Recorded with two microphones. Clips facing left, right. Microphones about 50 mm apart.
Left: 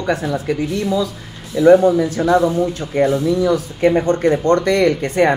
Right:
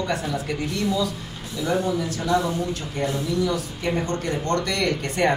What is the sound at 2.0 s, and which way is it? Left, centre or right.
Speech, left.